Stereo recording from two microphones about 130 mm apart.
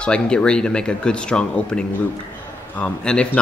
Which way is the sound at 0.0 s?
5° left (ahead or behind).